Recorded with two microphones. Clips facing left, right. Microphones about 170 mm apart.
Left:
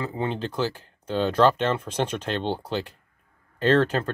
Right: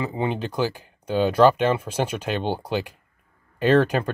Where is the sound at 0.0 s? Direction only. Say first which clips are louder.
Right 2 dB; 15° right (ahead or behind).